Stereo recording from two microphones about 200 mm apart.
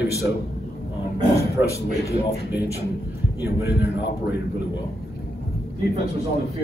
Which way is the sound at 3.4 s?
55° left (ahead or behind).